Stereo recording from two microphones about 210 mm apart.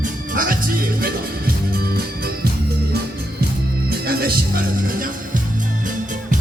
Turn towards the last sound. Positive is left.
turn(degrees=-45)  # may be behind; listen again after turning